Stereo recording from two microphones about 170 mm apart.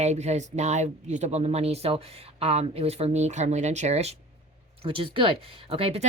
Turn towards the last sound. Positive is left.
turn(degrees=-35)  # may be behind; listen again after turning